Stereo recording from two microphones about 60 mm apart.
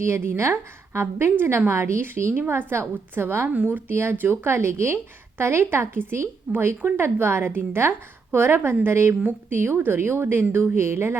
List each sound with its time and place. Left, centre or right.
0.0 s a woman's voice: right
3.5 s a woman's voice: right